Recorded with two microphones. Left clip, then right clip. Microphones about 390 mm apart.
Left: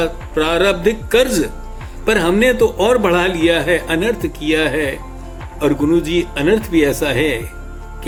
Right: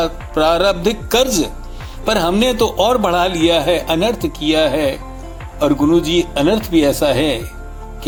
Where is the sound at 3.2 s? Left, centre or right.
Centre.